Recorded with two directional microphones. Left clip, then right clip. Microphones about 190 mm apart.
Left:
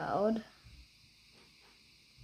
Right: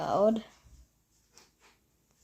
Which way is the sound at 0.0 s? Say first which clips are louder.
Right 6 dB; 50° right (ahead or behind).